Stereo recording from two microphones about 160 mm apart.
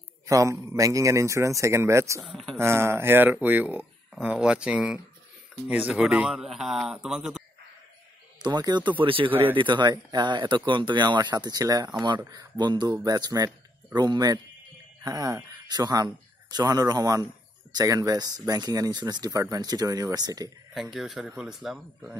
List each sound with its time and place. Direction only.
0.3 s speech: 20° right (ahead or behind)
2.2 s a man's voice: centre (ahead or behind)
2.6 s a man's voice: 15° right (ahead or behind)
8.4 s speech: 25° right (ahead or behind)
9.3 s speech: 10° right (ahead or behind)
9.6 s speech: 30° right (ahead or behind)
20.7 s a man's voice: centre (ahead or behind)